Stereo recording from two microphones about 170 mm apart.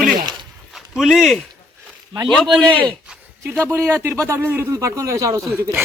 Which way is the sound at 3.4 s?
15° right (ahead or behind).